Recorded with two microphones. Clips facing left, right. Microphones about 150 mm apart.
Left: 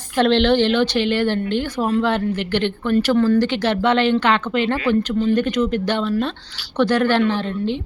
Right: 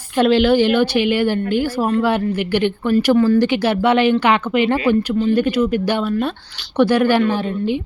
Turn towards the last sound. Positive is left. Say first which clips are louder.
# right 2 dB
turn(degrees=-10)  # may be behind; listen again after turning